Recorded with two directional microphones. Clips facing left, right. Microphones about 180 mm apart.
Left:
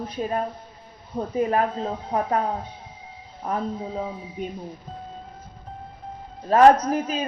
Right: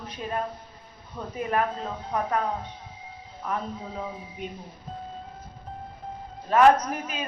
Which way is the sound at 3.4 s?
30° left (ahead or behind).